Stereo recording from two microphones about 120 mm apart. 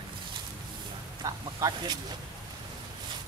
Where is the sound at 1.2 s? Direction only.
30° right (ahead or behind).